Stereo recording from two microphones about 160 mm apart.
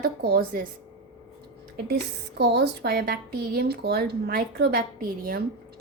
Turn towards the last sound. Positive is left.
turn(degrees=-65)  # may be behind; listen again after turning